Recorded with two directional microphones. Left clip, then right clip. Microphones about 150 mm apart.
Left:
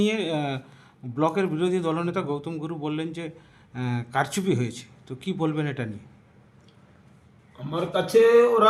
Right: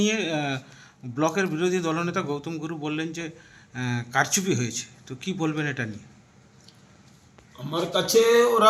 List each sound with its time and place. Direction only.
0.0 s a man's voice: 15° left (ahead or behind)
7.6 s a man's voice: 10° left (ahead or behind)